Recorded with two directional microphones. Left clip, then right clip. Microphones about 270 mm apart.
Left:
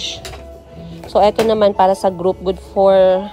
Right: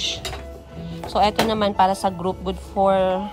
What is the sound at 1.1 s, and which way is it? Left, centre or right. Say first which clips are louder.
Speech: left 7 dB; right.